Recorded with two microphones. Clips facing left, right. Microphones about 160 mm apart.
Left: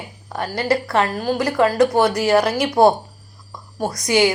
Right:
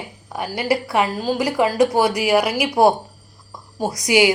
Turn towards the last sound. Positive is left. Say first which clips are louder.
# right 1 dB
turn(degrees=-15)  # may be behind; listen again after turning